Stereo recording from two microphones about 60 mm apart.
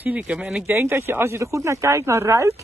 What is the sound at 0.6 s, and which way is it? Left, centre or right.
Speech, right.